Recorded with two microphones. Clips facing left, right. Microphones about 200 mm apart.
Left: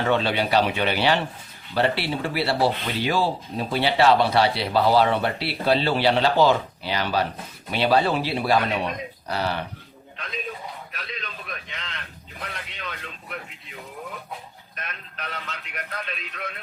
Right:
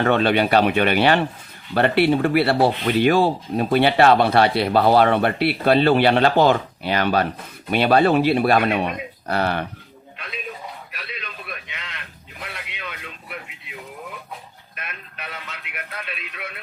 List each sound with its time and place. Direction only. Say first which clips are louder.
0.0 s speech: right 5 dB; 60° right (ahead or behind)
10.9 s a sound: even; 5° right (ahead or behind)
14.8 s a man's voice: even; 10° right (ahead or behind)